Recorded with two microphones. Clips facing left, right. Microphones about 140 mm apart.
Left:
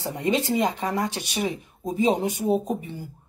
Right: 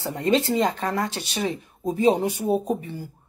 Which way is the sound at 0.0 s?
15° left (ahead or behind).